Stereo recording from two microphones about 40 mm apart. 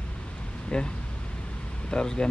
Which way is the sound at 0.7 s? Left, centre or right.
Left.